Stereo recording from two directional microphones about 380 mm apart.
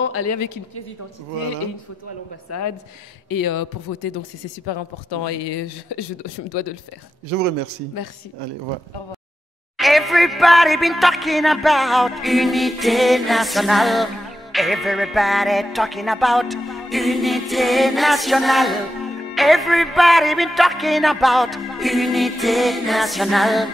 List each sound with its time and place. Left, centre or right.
0.0 s speech: left
3.3 s speech: left
5.2 s speech: left
7.2 s speech: right
9.8 s music: centre